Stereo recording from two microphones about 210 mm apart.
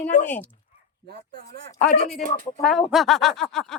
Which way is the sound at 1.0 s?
45° right (ahead or behind).